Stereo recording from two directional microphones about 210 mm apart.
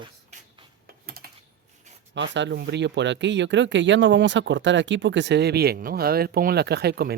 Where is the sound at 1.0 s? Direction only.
45° right (ahead or behind).